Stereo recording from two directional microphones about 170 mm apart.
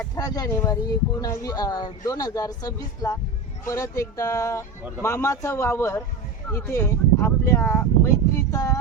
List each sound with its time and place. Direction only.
0.2 s speech: 20° left (ahead or behind)